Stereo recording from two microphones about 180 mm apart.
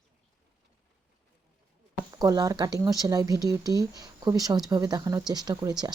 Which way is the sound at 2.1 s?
20° right (ahead or behind).